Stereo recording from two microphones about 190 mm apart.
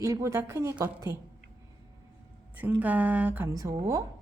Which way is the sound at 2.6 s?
10° right (ahead or behind).